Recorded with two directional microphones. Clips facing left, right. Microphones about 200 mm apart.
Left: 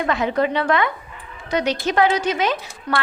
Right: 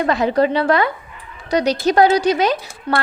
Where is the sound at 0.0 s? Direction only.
35° right (ahead or behind).